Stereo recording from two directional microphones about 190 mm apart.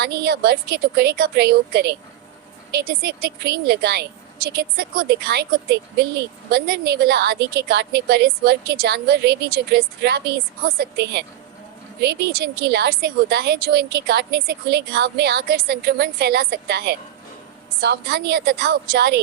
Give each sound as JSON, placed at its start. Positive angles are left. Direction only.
{"t": 0.0, "sound": "a woman's voice", "side_deg": -60}